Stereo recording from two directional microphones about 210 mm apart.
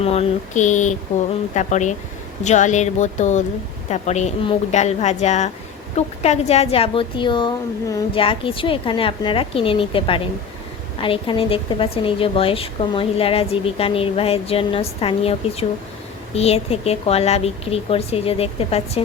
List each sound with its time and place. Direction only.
0.0 s a woman's voice: 30° left (ahead or behind)